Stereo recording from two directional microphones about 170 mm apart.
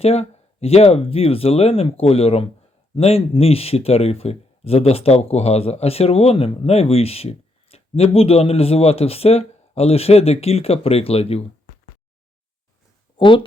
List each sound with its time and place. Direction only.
0.0 s speech: 35° left (ahead or behind)
13.1 s speech: 30° left (ahead or behind)